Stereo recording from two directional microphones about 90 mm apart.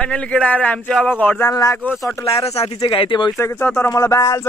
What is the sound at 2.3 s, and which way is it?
Speech, 90° left.